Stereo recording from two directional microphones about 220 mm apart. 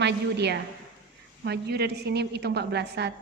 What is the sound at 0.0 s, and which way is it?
A woman's voice, 50° right (ahead or behind).